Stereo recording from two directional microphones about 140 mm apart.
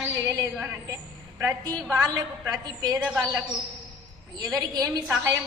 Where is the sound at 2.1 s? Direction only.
30° right (ahead or behind).